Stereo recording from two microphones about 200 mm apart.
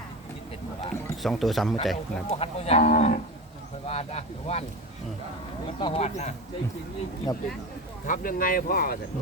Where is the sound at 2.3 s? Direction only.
30° left (ahead or behind).